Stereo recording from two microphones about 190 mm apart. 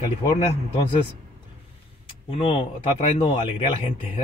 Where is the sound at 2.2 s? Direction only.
30° left (ahead or behind).